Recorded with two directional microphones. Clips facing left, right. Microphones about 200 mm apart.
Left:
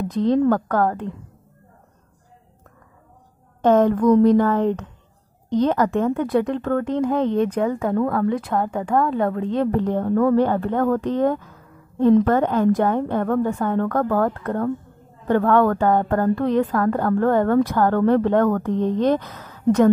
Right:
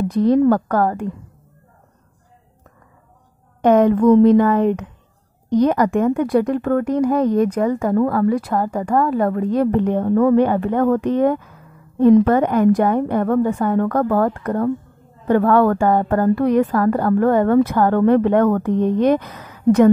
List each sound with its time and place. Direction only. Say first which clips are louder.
0.2 s speech: right 3 dB; 10° right (ahead or behind)
3.6 s speech: right 3 dB; 15° right (ahead or behind)
9.7 s speech: right 3 dB; 15° right (ahead or behind)